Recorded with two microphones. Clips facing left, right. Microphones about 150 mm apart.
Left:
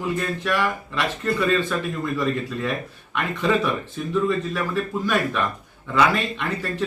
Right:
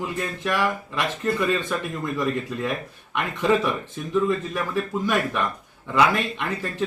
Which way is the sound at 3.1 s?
15° right (ahead or behind).